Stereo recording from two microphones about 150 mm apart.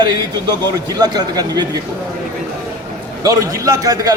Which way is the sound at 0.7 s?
25° right (ahead or behind).